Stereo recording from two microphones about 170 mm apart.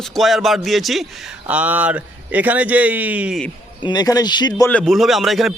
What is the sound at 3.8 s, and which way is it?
Speech, 25° left (ahead or behind).